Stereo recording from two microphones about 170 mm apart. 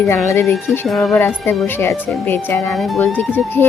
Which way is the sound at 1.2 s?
15° left (ahead or behind).